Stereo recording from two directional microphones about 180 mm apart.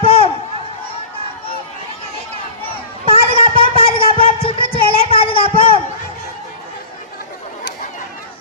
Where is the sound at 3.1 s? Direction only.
30° left (ahead or behind).